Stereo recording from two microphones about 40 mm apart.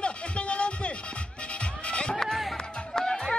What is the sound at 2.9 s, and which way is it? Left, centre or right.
Music, centre.